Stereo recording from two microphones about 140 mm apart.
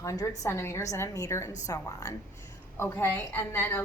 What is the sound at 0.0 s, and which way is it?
A woman's voice, 20° left (ahead or behind).